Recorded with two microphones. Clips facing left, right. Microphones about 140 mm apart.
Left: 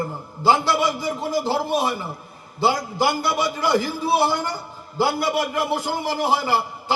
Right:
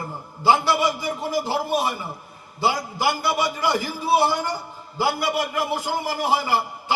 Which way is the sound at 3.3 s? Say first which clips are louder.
Left 2 dB; 15° right (ahead or behind).